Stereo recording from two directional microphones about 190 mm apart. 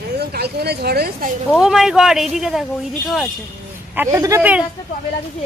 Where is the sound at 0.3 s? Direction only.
55° right (ahead or behind).